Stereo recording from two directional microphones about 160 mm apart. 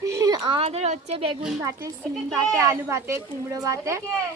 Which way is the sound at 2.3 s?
20° right (ahead or behind).